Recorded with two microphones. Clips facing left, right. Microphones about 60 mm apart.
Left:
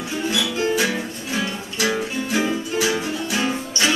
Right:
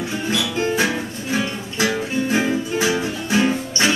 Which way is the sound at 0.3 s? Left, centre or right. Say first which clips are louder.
Even; right.